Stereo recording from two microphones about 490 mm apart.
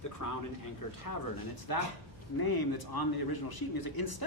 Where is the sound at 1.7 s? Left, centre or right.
Left.